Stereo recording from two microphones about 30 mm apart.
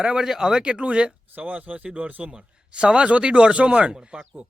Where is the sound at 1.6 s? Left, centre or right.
Right.